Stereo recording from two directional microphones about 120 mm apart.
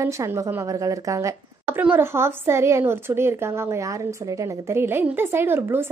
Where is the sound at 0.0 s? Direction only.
25° right (ahead or behind).